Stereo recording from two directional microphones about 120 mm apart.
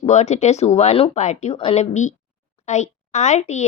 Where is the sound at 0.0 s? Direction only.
70° left (ahead or behind).